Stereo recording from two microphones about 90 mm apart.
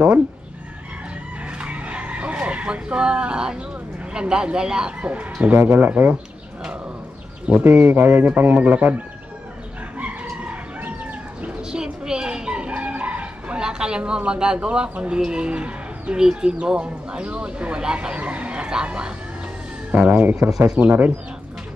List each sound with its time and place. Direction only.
1.6 s skidding: 15° right (ahead or behind)
4.1 s speech: 10° right (ahead or behind)
7.4 s speech: 15° right (ahead or behind)
9.9 s chicken: 15° right (ahead or behind)
11.4 s a sound: 10° right (ahead or behind)
19.9 s speech: 15° right (ahead or behind)